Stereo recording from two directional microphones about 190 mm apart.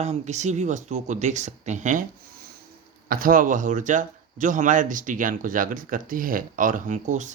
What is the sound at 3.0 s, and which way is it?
A man's voice, 45° right (ahead or behind).